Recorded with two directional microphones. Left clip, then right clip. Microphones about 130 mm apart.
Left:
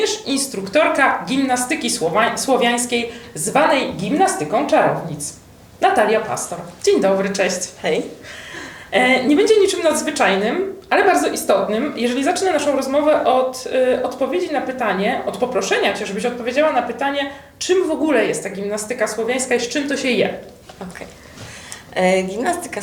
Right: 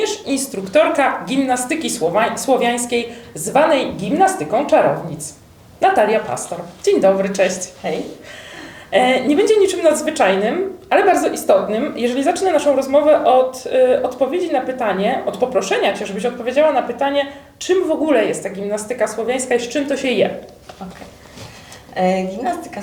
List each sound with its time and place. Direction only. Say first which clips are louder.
0.0 s a woman's voice: even; 25° right (ahead or behind)
8.9 s a woman's voice: right 1 dB; 30° right (ahead or behind)
21.9 s a woman's voice: left 1 dB; 40° left (ahead or behind)